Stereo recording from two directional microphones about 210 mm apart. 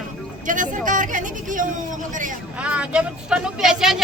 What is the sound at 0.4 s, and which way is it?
A woman's voice, 40° right (ahead or behind).